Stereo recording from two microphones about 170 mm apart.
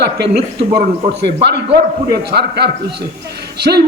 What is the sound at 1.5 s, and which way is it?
A man's voice, 70° right (ahead or behind).